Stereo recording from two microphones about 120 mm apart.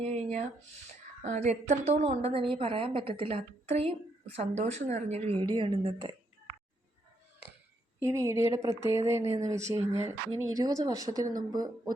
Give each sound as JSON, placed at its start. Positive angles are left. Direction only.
{"t": 0.0, "sound": "a woman's voice", "side_deg": -75}
{"t": 2.4, "sound": "a woman's voice", "side_deg": -50}
{"t": 5.4, "sound": "speech", "side_deg": -40}
{"t": 8.0, "sound": "a woman's voice", "side_deg": -25}